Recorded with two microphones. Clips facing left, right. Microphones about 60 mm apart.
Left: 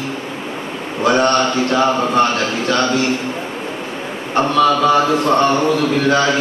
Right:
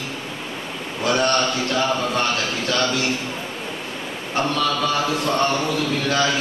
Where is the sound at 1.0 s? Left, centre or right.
Left.